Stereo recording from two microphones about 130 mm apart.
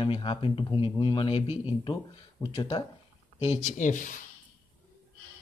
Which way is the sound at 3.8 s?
75° left (ahead or behind).